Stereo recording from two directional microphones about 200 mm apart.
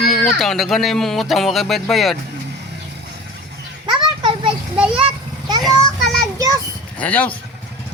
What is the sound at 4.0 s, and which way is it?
Children playing, 25° right (ahead or behind).